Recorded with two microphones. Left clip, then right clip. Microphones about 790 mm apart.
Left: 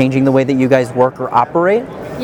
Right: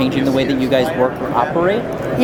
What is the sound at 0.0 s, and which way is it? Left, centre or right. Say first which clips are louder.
Speech: left 4 dB; left.